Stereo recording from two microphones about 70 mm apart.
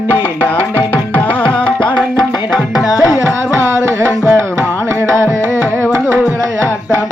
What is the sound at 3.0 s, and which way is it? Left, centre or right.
Carnatic music, left.